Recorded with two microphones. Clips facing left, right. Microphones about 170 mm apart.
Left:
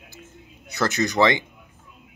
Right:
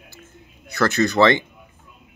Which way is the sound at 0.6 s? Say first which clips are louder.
Right 4 dB; 20° left (ahead or behind).